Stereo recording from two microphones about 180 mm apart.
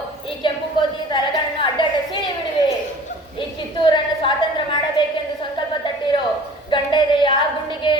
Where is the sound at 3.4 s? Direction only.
25° left (ahead or behind).